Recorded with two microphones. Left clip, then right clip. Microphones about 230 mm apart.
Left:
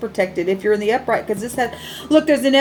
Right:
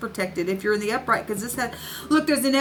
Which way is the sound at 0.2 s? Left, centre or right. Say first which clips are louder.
Left 8 dB; right.